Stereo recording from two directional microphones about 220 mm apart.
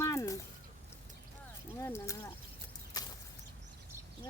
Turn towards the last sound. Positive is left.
turn(degrees=15)  # may be behind; listen again after turning